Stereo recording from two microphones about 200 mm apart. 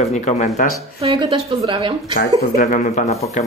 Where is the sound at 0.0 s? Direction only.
35° left (ahead or behind).